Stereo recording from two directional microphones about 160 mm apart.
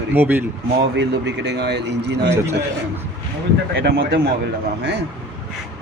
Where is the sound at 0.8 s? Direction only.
90° right.